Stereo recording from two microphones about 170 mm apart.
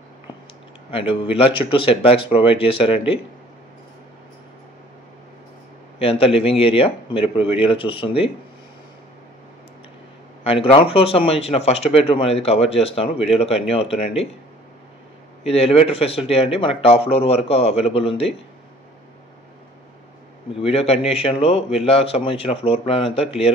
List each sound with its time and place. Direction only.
0.9 s speech: 30° left (ahead or behind)
5.9 s speech: 35° left (ahead or behind)
10.4 s speech: 35° left (ahead or behind)
15.4 s speech: 35° left (ahead or behind)
20.6 s speech: 35° left (ahead or behind)